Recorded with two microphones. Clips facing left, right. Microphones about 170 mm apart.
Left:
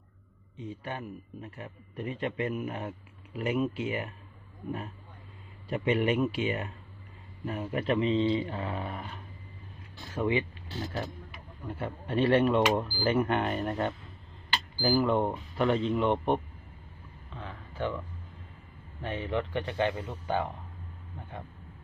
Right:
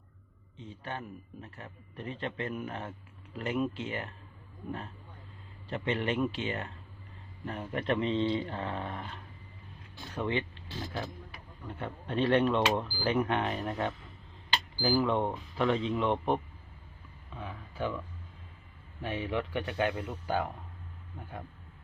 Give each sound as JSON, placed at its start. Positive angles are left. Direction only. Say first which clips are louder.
{"t": 0.6, "sound": "a man's voice", "louder": "left 3 dB", "side_deg": 15}
{"t": 5.6, "sound": "a man's voice", "louder": "left 5 dB", "side_deg": 10}
{"t": 11.7, "sound": "speech", "louder": "left 3 dB", "side_deg": 5}
{"t": 17.3, "sound": "a sound", "louder": "left 1 dB", "side_deg": -10}
{"t": 19.0, "sound": "speech", "louder": "left 1 dB", "side_deg": -10}